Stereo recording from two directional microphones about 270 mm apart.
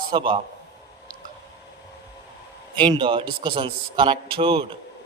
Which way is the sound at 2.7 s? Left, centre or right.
Centre.